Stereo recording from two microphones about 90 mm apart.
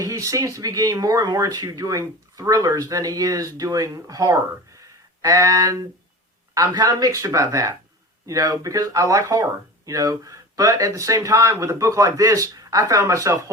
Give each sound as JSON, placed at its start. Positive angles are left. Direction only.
{"t": 0.0, "sound": "speech", "side_deg": -40}
{"t": 4.8, "sound": "a sound", "side_deg": -40}
{"t": 6.5, "sound": "speech", "side_deg": -40}